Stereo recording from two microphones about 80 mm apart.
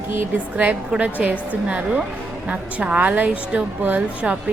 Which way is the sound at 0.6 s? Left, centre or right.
Centre.